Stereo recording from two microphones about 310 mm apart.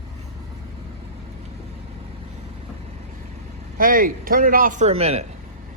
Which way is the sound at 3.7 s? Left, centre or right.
Right.